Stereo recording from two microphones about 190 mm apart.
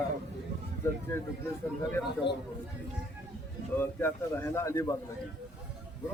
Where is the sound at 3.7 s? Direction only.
10° left (ahead or behind).